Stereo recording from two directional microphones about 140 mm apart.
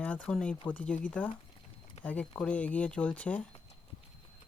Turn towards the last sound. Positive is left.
turn(degrees=10)  # may be behind; listen again after turning